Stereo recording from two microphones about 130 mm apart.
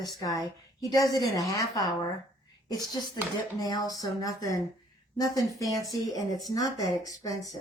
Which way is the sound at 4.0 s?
25° left (ahead or behind).